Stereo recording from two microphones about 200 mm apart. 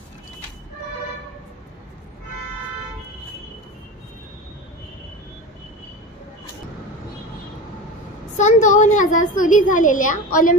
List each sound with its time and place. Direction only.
8.4 s a child's voice: 35° left (ahead or behind)